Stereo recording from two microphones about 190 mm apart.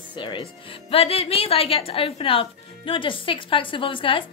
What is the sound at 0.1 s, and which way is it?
A woman's voice, 25° left (ahead or behind).